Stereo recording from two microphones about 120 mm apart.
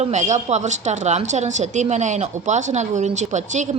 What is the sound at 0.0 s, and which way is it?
A woman's voice, 80° right.